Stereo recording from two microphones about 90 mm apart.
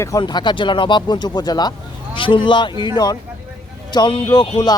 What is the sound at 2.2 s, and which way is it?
Speech, 70° left (ahead or behind).